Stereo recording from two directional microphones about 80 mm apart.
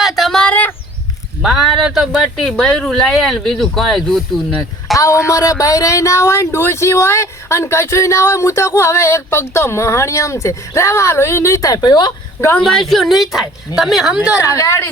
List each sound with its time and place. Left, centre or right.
0.0 s a sound: centre
0.4 s a sound: centre
1.4 s speech: centre
4.9 s speech: left
12.5 s speech: centre
14.4 s speech: left